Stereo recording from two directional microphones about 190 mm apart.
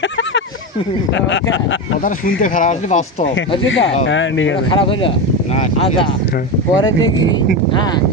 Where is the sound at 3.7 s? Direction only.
75° left (ahead or behind).